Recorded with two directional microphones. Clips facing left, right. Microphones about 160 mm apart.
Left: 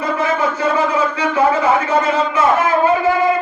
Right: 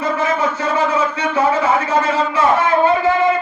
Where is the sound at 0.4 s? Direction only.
30° left (ahead or behind).